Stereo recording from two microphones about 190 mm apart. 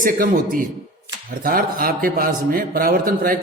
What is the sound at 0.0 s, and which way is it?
A man's voice, 45° right (ahead or behind).